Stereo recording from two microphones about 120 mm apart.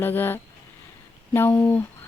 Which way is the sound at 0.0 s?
15° left (ahead or behind).